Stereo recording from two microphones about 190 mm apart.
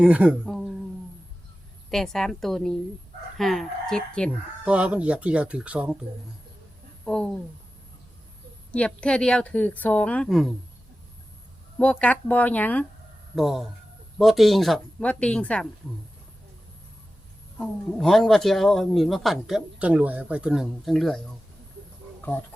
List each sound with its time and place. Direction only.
0.0 s a sound: 5° right (ahead or behind)
1.9 s speech: centre (ahead or behind)
4.7 s speech: 5° right (ahead or behind)
7.0 s speech: 5° left (ahead or behind)
8.7 s a woman's voice: 5° left (ahead or behind)
11.8 s a woman's voice: 5° left (ahead or behind)
17.6 s speech: 5° left (ahead or behind)
22.2 s speech: 10° left (ahead or behind)